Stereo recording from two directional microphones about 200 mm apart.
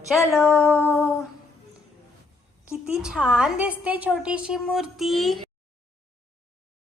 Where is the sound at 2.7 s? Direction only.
5° right (ahead or behind).